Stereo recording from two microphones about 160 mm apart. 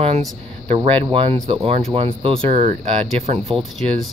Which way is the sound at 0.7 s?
30° right (ahead or behind).